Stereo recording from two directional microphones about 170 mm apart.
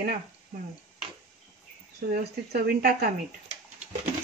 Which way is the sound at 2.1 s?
60° right (ahead or behind).